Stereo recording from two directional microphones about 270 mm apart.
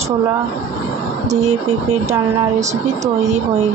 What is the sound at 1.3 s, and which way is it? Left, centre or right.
Speech, right.